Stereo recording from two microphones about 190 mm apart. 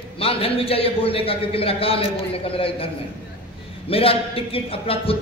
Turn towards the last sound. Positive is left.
turn(degrees=30)  # may be behind; listen again after turning